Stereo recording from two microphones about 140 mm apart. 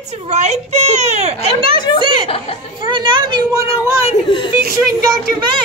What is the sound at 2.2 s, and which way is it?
Speech, 45° left (ahead or behind).